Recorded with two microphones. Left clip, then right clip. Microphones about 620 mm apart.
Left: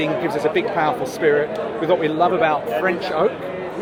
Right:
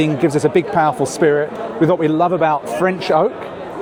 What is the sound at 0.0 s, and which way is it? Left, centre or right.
A man's voice, right.